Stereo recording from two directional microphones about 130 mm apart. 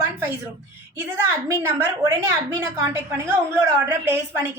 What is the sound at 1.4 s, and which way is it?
A woman's voice, 20° right (ahead or behind).